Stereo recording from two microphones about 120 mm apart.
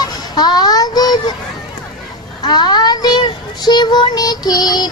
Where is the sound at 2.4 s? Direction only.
35° left (ahead or behind).